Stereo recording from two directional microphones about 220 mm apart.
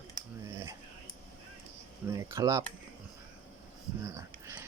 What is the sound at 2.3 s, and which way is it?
Speech, 15° right (ahead or behind).